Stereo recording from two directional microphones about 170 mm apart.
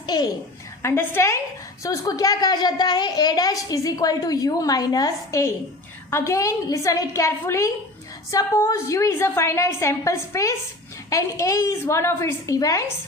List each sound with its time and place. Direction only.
0.1 s a woman's voice: 20° left (ahead or behind)